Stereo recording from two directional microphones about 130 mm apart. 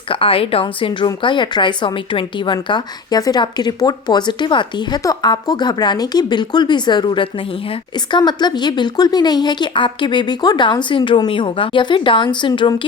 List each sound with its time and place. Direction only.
0.1 s a woman's voice: 45° left (ahead or behind)